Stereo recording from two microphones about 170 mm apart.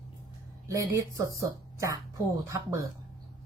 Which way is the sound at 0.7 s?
20° right (ahead or behind).